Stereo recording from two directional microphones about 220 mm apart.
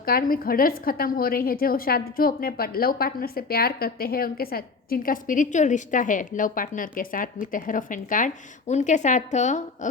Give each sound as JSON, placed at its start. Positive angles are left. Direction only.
{"t": 0.0, "sound": "a woman's voice", "side_deg": 40}